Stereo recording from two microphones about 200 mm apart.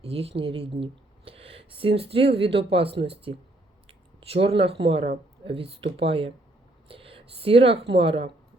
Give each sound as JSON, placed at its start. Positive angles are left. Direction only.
{"t": 0.0, "sound": "speech", "side_deg": -30}